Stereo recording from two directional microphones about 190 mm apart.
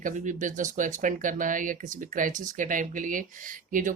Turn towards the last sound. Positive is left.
turn(degrees=-45)  # may be behind; listen again after turning